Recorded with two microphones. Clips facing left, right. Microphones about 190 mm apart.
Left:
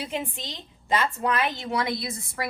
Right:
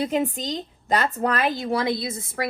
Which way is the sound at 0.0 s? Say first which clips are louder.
Right 8 dB; 40° right (ahead or behind).